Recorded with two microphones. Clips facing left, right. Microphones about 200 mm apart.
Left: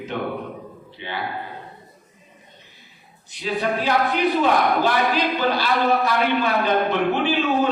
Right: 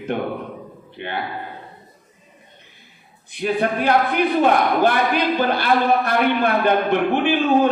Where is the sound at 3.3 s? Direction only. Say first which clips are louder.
Right 3 dB; 55° right (ahead or behind).